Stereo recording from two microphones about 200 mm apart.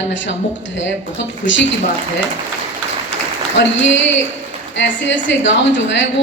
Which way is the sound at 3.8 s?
65° left (ahead or behind).